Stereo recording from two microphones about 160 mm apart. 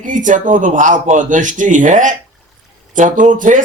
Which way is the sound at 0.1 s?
55° right (ahead or behind).